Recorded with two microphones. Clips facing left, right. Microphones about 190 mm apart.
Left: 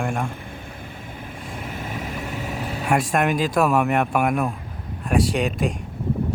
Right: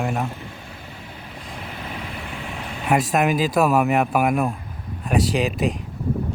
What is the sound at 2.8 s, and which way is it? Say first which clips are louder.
Speech: right 2 dB; 5° right (ahead or behind).